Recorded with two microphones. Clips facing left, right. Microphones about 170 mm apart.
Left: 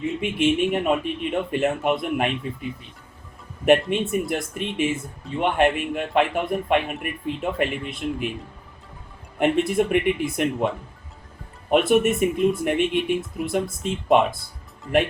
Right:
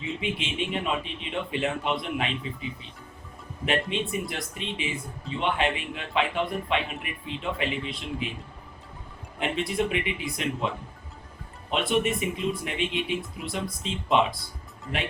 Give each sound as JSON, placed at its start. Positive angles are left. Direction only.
{"t": 0.0, "sound": "speech", "side_deg": 50}
{"t": 3.7, "sound": "speech", "side_deg": 55}
{"t": 9.4, "sound": "speech", "side_deg": 50}
{"t": 11.7, "sound": "speech", "side_deg": 55}